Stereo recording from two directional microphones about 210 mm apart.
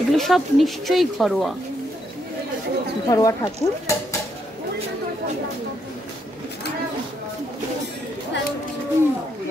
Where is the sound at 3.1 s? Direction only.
15° left (ahead or behind).